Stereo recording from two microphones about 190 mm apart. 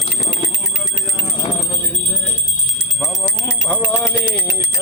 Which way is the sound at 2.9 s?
Centre (ahead or behind).